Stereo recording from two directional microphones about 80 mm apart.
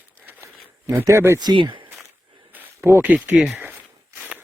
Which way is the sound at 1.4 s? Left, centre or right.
Right.